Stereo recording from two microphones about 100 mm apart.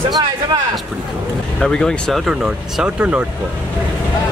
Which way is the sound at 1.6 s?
5° left (ahead or behind).